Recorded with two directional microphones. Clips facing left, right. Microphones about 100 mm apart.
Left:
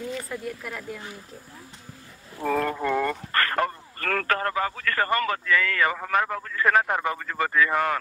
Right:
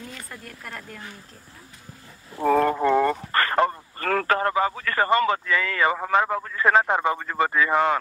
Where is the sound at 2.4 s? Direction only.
35° right (ahead or behind).